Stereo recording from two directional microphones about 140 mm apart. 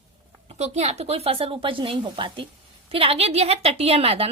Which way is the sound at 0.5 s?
50° right (ahead or behind).